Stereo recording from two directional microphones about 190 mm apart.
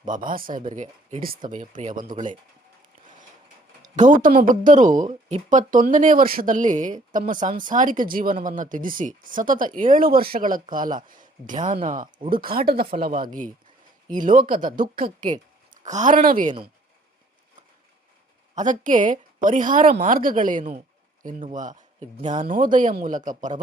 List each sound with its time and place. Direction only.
0.0 s speech: 45° right (ahead or behind)
3.8 s speech: 40° right (ahead or behind)
18.5 s speech: 40° right (ahead or behind)